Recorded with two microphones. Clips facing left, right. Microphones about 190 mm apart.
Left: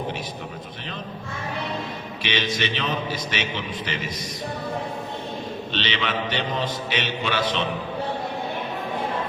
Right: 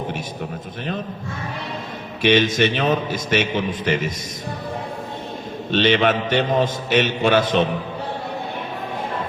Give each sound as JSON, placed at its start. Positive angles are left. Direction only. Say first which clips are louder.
{"t": 2.2, "sound": "a man's voice", "louder": "right 10 dB", "side_deg": -50}
{"t": 5.7, "sound": "a man's voice", "louder": "right 11 dB", "side_deg": -50}